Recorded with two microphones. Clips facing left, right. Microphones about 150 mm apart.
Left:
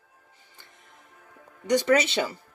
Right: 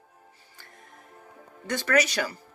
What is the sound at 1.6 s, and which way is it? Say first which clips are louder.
Speech: left 3 dB; 20° left (ahead or behind).